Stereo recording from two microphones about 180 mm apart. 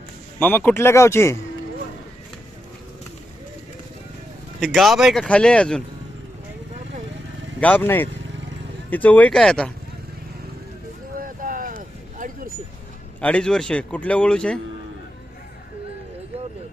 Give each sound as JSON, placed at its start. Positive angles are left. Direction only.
{"t": 0.3, "sound": "a man's voice", "side_deg": 10}
{"t": 4.6, "sound": "a man's voice", "side_deg": 0}
{"t": 7.6, "sound": "a man's voice", "side_deg": 10}
{"t": 11.2, "sound": "vehicle", "side_deg": -50}
{"t": 13.2, "sound": "a man's voice", "side_deg": 5}